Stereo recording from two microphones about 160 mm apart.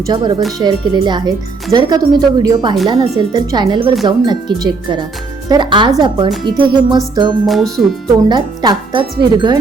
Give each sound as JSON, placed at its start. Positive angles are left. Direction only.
{"t": 0.0, "sound": "speech", "side_deg": -25}
{"t": 7.4, "sound": "music", "side_deg": 0}
{"t": 8.3, "sound": "speech", "side_deg": -25}